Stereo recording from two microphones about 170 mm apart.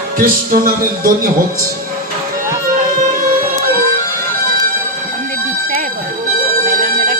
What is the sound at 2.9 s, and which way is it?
Music, 55° right (ahead or behind).